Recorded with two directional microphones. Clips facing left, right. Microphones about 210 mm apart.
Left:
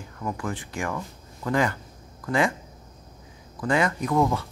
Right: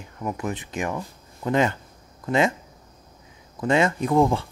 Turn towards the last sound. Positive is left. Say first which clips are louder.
# right 3 dB
turn(degrees=-30)  # may be behind; listen again after turning